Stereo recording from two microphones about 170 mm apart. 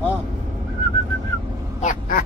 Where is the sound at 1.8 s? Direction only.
50° left (ahead or behind).